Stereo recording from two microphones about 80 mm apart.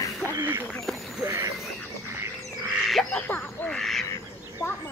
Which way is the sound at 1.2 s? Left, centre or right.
Right.